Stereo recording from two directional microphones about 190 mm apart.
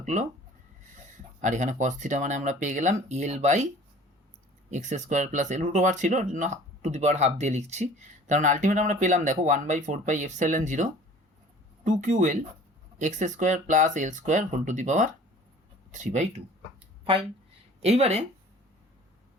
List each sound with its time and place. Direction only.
0.0 s speech: 40° right (ahead or behind)
1.4 s speech: 40° right (ahead or behind)
4.7 s speech: 40° right (ahead or behind)
17.0 s a sound: 30° right (ahead or behind)
17.8 s speech: 30° right (ahead or behind)